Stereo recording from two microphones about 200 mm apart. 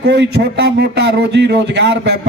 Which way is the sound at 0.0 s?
55° right (ahead or behind).